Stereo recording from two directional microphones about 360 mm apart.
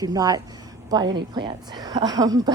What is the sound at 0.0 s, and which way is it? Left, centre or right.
Speech, centre.